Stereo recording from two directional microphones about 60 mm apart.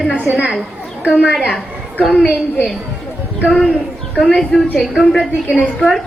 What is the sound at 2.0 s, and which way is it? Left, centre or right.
Speech, centre.